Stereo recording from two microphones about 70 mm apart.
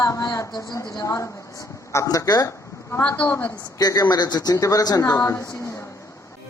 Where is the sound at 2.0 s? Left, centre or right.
Left.